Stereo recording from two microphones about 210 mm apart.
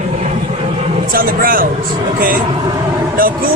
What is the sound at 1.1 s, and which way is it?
Speech, 45° right (ahead or behind).